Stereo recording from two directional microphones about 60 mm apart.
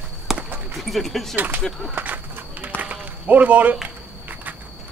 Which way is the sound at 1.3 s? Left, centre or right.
Right.